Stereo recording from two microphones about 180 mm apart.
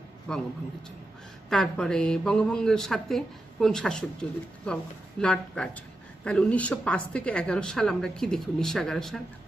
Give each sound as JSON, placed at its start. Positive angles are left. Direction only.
{"t": 0.3, "sound": "speech", "side_deg": 5}
{"t": 1.5, "sound": "speech", "side_deg": 5}